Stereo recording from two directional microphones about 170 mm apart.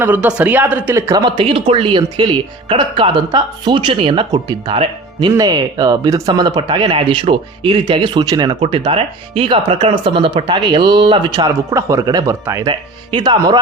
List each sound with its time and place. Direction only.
0.0 s speech: 10° right (ahead or behind); by 13.6 s 25° right (ahead or behind)